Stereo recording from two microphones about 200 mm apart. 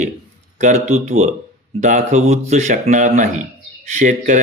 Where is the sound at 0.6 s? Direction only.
35° right (ahead or behind).